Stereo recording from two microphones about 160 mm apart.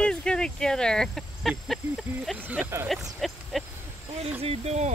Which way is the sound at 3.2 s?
Centre (ahead or behind).